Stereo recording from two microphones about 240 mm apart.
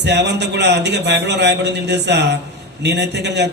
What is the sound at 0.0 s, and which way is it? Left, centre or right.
A man's voice, right.